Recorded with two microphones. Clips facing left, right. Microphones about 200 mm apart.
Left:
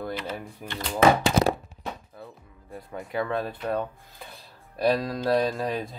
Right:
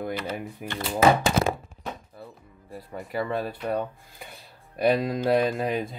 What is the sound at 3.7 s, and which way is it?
Speech, 15° right (ahead or behind).